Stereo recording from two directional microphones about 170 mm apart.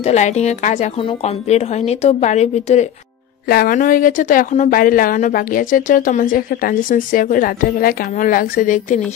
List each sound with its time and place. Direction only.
0.0 s speech: 40° left (ahead or behind)
3.4 s speech: 60° left (ahead or behind)